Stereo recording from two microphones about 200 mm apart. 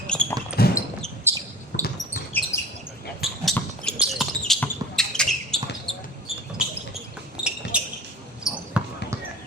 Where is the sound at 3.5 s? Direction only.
5° left (ahead or behind).